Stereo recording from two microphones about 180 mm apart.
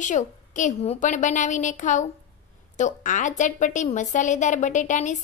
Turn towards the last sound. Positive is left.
turn(degrees=45)  # may be behind; listen again after turning